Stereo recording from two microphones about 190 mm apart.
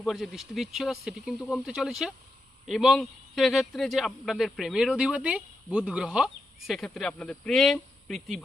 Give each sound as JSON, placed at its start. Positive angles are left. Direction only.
{"t": 0.0, "sound": "a man's voice", "side_deg": 0}